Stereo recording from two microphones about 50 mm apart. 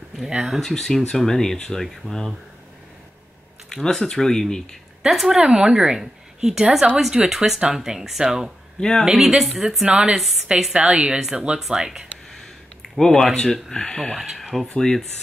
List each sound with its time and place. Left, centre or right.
0.6 s speech: centre
3.7 s speech: centre
5.0 s a woman's voice: centre
8.7 s speech: centre
9.0 s a woman's voice: centre
9.8 s a woman's voice: right
11.6 s a woman's voice: centre
13.0 s speech: centre
14.3 s speech: centre
14.8 s speech: centre